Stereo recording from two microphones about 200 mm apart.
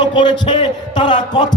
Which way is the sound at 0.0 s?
25° left (ahead or behind).